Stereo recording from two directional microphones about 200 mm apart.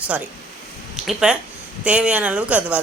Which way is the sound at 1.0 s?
5° right (ahead or behind).